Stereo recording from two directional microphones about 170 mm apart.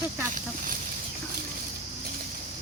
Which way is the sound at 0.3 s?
55° right (ahead or behind).